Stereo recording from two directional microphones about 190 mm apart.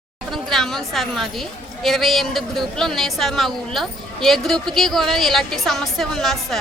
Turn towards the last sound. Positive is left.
turn(degrees=0)  # may be behind; listen again after turning